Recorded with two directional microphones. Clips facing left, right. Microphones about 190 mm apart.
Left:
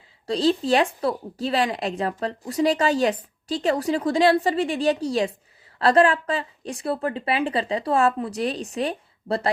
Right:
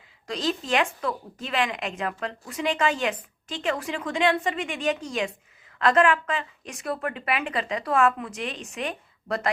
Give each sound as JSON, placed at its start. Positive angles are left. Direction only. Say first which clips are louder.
{"t": 0.3, "sound": "a woman's voice", "louder": "left 7 dB", "side_deg": 30}